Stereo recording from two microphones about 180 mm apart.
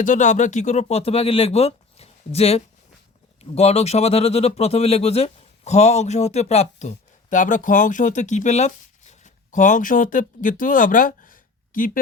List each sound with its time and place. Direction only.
0.0 s speech: 45° left (ahead or behind)